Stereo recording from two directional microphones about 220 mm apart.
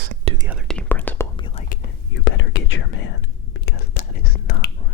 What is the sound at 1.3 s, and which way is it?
Whispering, 20° left (ahead or behind).